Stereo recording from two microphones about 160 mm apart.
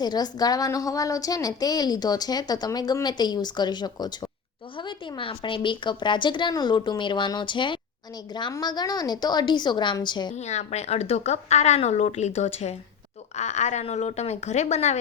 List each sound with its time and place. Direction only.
0.0 s a woman's voice: 25° left (ahead or behind)
10.3 s speech: 45° left (ahead or behind)